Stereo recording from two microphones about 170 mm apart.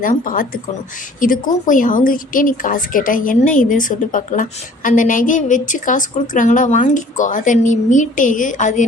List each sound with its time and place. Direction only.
0.0 s a woman's voice: 55° left (ahead or behind)